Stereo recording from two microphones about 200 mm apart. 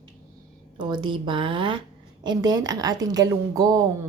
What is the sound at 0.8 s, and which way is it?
A woman's voice, 20° right (ahead or behind).